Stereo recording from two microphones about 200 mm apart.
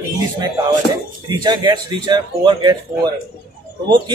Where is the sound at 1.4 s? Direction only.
20° right (ahead or behind).